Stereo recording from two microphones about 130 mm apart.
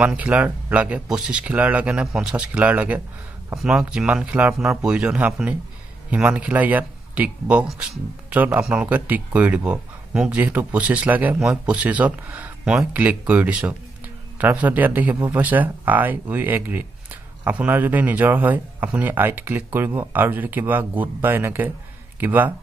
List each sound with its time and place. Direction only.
0.0 s speech: 10° right (ahead or behind)